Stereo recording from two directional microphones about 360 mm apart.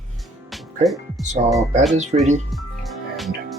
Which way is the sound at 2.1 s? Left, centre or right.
Centre.